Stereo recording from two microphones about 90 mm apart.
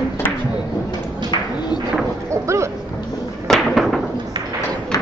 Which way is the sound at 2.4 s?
35° right (ahead or behind).